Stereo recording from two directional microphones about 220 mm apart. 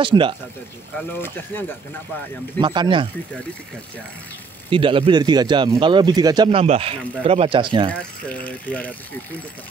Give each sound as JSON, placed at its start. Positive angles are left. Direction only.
{"t": 0.0, "sound": "speech", "side_deg": -20}
{"t": 0.9, "sound": "speech", "side_deg": 10}
{"t": 2.6, "sound": "speech", "side_deg": -20}
{"t": 4.6, "sound": "speech", "side_deg": -25}
{"t": 7.9, "sound": "speech", "side_deg": 5}